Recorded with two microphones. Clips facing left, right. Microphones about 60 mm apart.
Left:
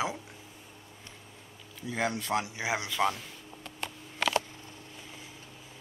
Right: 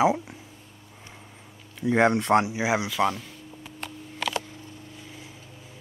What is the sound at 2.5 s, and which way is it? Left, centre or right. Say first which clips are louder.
Speech: right 7 dB; centre.